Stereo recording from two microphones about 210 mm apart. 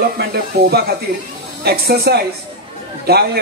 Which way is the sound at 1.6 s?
50° right (ahead or behind).